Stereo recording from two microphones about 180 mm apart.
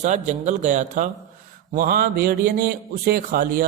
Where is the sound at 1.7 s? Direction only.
50° right (ahead or behind).